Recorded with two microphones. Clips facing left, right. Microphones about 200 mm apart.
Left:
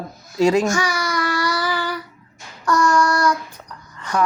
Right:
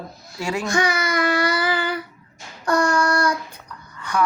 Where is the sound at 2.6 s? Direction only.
55° right (ahead or behind).